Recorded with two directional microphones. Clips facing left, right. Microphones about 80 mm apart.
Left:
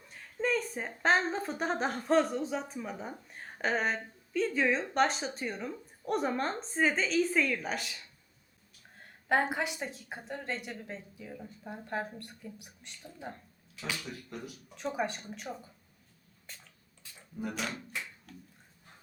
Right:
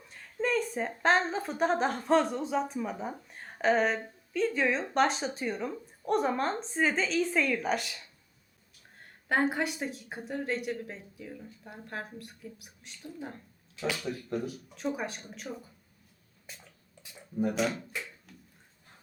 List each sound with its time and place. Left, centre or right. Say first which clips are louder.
0.1 s a woman's voice: right 1 dB; centre
10.2 s a woman's voice: right 5 dB; centre
13.9 s speech: right 8 dB; right
14.8 s a woman's voice: even; centre
17.0 s a sound: right 8 dB; centre
17.7 s a sound: right 3 dB; centre